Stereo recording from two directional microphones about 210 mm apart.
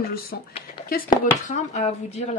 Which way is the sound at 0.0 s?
45° left (ahead or behind).